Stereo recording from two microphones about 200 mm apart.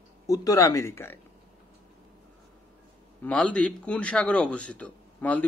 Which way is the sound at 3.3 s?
5° left (ahead or behind).